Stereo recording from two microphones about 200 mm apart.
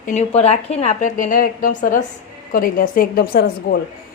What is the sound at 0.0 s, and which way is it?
A woman's voice, 35° left (ahead or behind).